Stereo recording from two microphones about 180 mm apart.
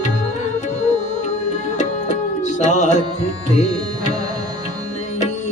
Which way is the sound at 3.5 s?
40° left (ahead or behind).